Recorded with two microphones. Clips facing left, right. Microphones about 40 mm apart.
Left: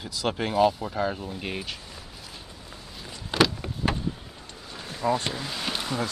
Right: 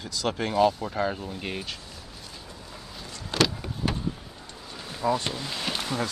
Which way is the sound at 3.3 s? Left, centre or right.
Centre.